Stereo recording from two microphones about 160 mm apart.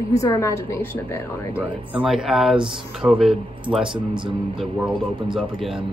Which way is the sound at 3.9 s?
30° right (ahead or behind).